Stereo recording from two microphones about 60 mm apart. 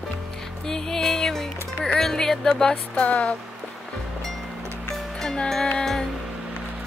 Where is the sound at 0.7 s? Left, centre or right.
Centre.